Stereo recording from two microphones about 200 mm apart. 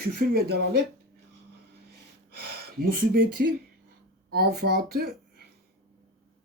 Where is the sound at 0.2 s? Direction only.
50° right (ahead or behind).